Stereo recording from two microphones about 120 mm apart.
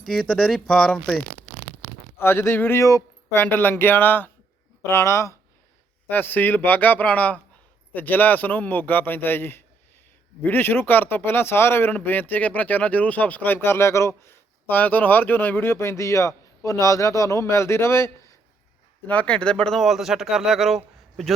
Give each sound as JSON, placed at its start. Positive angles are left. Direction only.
{"t": 0.0, "sound": "speech", "side_deg": 5}
{"t": 2.1, "sound": "speech", "side_deg": 20}
{"t": 19.0, "sound": "speech", "side_deg": 10}